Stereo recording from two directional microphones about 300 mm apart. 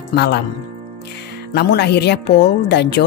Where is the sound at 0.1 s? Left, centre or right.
Left.